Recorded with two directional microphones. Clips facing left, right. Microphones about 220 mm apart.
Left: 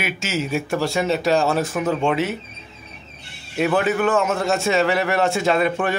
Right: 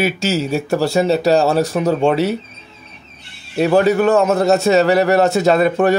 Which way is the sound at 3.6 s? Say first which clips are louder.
Right 6 dB; 35° right (ahead or behind).